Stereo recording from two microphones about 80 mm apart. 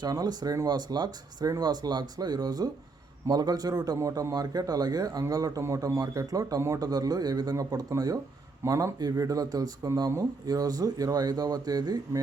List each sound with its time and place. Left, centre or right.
0.0 s speech: right
6.8 s speech: right